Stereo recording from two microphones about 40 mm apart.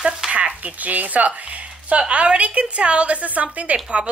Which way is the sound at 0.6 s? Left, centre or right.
Right.